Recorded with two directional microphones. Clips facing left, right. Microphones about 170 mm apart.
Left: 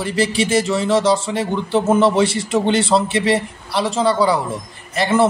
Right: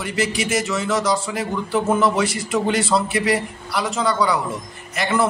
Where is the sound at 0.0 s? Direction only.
30° left (ahead or behind).